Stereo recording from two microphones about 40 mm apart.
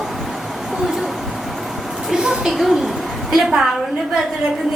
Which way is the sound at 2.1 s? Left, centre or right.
Centre.